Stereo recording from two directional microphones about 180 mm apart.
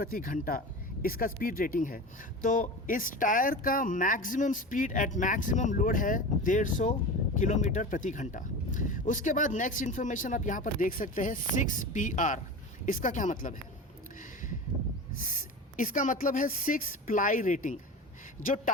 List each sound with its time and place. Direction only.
0.0 s speech: 50° left (ahead or behind)
15.7 s speech: 45° left (ahead or behind)